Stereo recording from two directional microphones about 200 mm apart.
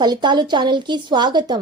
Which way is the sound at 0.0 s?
20° right (ahead or behind).